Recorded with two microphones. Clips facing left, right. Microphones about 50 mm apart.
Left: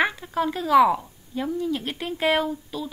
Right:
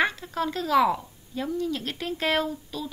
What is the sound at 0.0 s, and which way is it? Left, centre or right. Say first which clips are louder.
A woman's voice: left 2 dB; centre.